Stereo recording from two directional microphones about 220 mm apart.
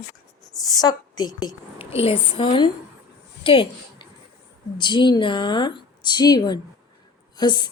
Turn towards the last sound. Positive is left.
turn(degrees=20)  # may be behind; listen again after turning